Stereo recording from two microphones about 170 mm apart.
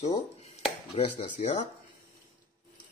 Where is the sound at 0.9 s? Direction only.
45° left (ahead or behind).